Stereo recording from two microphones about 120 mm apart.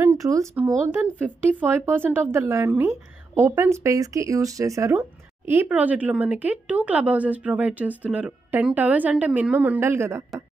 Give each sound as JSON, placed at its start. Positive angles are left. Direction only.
{"t": 0.0, "sound": "a sound", "side_deg": -25}
{"t": 0.7, "sound": "speech", "side_deg": -25}
{"t": 1.2, "sound": "speech", "side_deg": -15}
{"t": 5.5, "sound": "speech", "side_deg": -15}